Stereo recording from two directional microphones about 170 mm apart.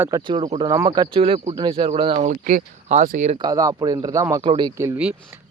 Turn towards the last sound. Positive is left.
turn(degrees=-15)  # may be behind; listen again after turning